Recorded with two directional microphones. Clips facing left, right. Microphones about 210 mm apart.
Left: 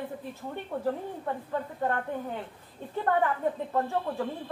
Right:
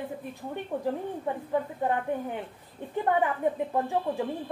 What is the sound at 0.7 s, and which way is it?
Speech, 15° right (ahead or behind).